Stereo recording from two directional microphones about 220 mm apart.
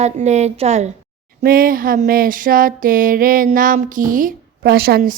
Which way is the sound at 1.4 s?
40° right (ahead or behind).